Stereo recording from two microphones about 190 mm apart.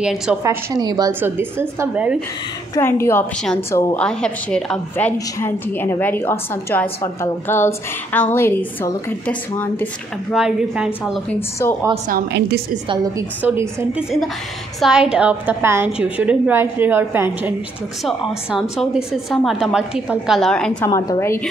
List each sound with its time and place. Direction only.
0.0 s a woman's voice: 5° right (ahead or behind)
0.4 s a woman's voice: 15° right (ahead or behind)
2.7 s a woman's voice: 15° left (ahead or behind)
10.3 s a woman's voice: 5° right (ahead or behind)
11.6 s a woman's voice: 15° left (ahead or behind)
12.1 s a woman's voice: 60° right (ahead or behind)
12.8 s a woman's voice: 25° right (ahead or behind)
13.4 s a woman's voice: 10° right (ahead or behind)
18.0 s a woman's voice: centre (ahead or behind)
20.9 s a woman's voice: 15° left (ahead or behind)